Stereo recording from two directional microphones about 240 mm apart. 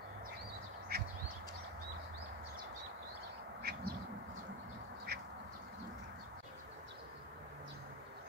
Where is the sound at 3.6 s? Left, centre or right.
Right.